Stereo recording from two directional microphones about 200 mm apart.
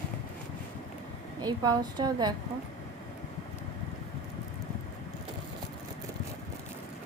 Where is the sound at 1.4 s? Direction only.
20° right (ahead or behind).